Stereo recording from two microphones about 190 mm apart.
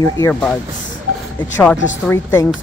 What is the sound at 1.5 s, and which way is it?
Speech, 10° left (ahead or behind).